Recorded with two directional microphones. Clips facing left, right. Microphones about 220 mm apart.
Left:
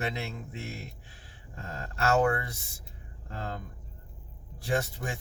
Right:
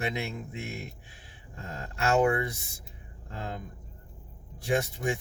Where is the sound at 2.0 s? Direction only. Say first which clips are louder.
Right 1 dB; 15° right (ahead or behind).